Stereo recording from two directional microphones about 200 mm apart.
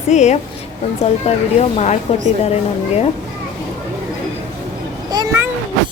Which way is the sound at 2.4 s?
30° left (ahead or behind).